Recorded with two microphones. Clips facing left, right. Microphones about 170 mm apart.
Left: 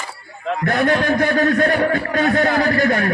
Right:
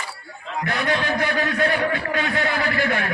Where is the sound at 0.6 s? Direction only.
45° left (ahead or behind).